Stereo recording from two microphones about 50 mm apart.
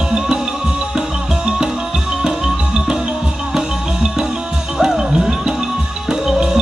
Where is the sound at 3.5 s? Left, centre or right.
Centre.